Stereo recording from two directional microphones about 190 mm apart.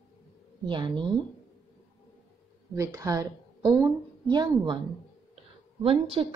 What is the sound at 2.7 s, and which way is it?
A woman's voice, 15° right (ahead or behind).